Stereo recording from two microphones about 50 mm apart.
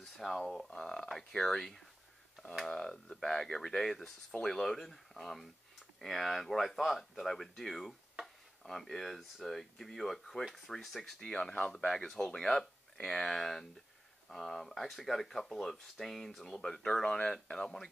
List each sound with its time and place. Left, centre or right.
0.0 s speech: centre